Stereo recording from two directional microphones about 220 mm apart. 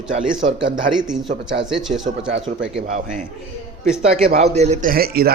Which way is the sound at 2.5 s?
30° right (ahead or behind).